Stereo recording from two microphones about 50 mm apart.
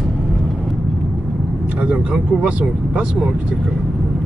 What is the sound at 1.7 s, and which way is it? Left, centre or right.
Speech, right.